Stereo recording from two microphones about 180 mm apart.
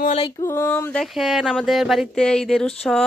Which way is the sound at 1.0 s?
Centre (ahead or behind).